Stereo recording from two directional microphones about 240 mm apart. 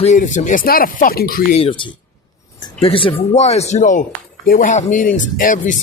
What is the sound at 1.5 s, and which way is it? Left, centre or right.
Speech, left.